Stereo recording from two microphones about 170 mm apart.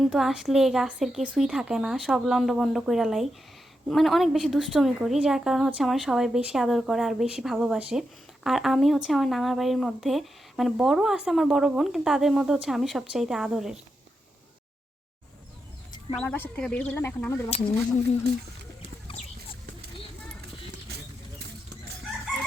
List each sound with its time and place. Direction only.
0.0 s speech: centre (ahead or behind)
16.1 s speech: 10° left (ahead or behind)
19.0 s a sound: 35° left (ahead or behind)